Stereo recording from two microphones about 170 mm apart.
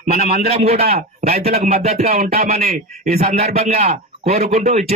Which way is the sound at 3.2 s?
35° right (ahead or behind).